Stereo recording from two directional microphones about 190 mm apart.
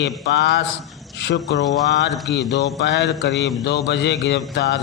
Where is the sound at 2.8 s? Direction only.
60° left (ahead or behind).